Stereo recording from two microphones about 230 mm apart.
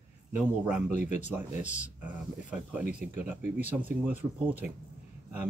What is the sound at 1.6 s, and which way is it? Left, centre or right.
Speech, left.